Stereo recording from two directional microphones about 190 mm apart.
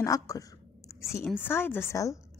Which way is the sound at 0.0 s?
15° left (ahead or behind).